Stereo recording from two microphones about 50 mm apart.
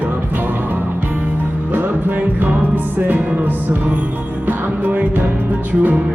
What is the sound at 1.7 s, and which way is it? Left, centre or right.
Music, right.